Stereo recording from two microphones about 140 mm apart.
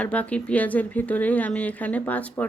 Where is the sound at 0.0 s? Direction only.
10° left (ahead or behind).